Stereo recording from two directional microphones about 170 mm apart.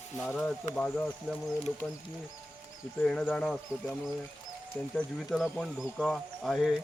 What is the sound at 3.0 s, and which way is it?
Speech, 5° left (ahead or behind).